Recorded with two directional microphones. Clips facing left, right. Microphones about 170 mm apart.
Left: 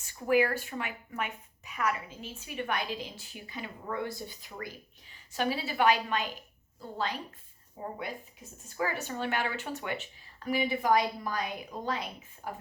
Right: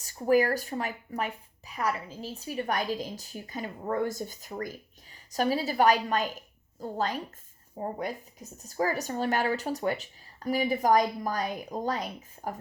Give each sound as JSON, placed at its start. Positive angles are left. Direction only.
{"t": 0.0, "sound": "a woman's voice", "side_deg": -40}